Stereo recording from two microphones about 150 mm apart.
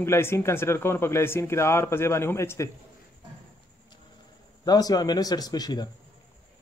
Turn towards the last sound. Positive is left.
turn(degrees=25)  # may be behind; listen again after turning